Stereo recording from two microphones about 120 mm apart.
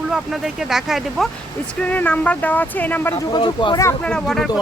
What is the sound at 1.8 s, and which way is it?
Speech, 15° left (ahead or behind).